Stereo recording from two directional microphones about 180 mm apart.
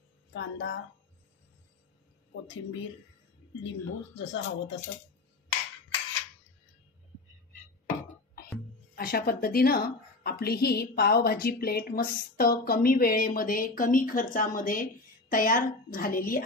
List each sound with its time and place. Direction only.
0.3 s speech: 90° left
2.4 s speech: 90° left
8.9 s a woman's voice: 55° left (ahead or behind)